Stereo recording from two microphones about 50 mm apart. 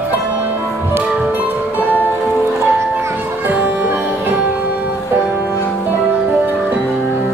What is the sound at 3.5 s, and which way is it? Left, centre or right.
Music, right.